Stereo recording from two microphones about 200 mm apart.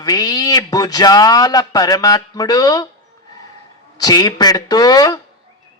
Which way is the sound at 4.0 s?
20° left (ahead or behind).